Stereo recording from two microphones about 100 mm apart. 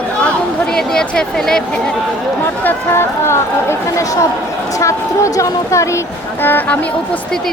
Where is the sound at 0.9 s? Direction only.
5° left (ahead or behind).